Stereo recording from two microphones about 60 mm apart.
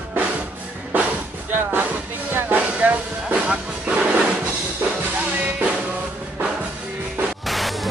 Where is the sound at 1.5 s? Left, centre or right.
Right.